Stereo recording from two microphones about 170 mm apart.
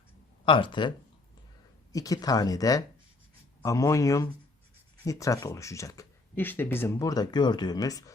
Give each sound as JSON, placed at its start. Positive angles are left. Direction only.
{"t": 0.4, "sound": "speech", "side_deg": 30}